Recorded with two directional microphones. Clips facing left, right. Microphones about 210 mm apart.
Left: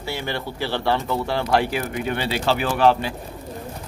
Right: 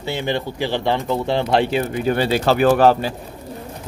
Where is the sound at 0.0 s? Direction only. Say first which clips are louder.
Right 5 dB; 20° right (ahead or behind).